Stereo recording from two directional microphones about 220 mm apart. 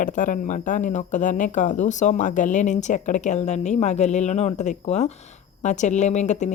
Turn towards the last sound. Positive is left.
turn(degrees=30)  # may be behind; listen again after turning